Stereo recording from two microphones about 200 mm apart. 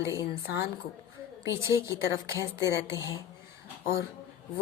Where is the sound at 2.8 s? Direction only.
15° right (ahead or behind).